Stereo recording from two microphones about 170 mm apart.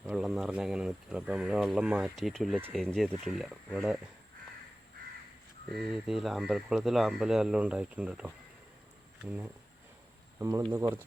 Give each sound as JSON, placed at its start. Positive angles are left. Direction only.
{"t": 0.0, "sound": "speech", "side_deg": -5}
{"t": 5.7, "sound": "speech", "side_deg": 0}
{"t": 10.4, "sound": "speech", "side_deg": -20}